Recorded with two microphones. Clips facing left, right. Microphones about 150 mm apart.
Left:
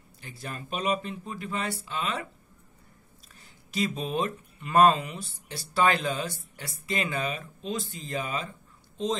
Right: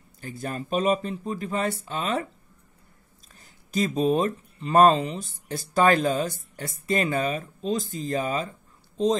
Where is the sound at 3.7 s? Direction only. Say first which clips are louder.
Right 6 dB; 40° right (ahead or behind).